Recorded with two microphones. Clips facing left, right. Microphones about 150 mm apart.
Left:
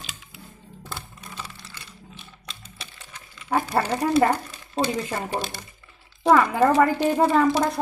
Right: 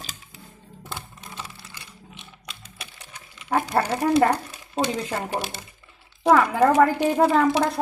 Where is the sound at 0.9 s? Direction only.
15° right (ahead or behind).